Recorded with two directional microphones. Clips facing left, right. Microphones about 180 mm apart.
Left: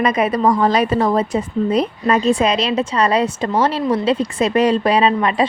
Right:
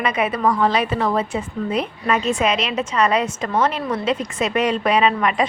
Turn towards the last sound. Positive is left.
turn(degrees=30)  # may be behind; listen again after turning